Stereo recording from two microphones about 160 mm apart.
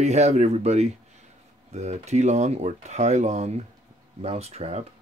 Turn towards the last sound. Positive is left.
turn(degrees=-40)  # may be behind; listen again after turning